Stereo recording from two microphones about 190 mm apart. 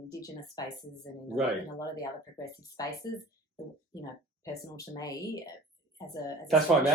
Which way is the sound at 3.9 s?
20° left (ahead or behind).